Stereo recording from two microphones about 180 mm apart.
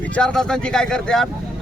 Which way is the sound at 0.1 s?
5° left (ahead or behind).